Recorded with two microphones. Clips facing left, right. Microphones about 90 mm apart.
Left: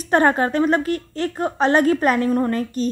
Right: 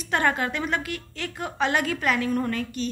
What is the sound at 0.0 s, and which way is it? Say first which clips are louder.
A woman's voice: left 7 dB; 40° left (ahead or behind).